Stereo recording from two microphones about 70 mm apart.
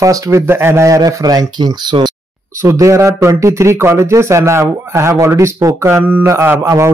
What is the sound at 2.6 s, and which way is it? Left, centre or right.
Speech, right.